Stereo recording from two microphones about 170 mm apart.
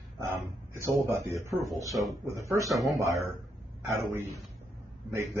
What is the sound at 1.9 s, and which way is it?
Speech, centre (ahead or behind).